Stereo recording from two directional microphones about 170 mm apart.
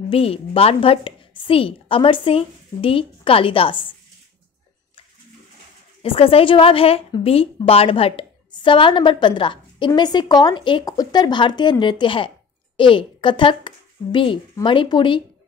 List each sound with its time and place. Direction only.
0.1 s a woman's voice: 35° left (ahead or behind)
6.0 s a woman's voice: 35° left (ahead or behind)